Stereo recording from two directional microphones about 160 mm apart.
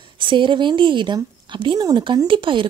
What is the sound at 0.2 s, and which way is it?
A woman's voice, 30° right (ahead or behind).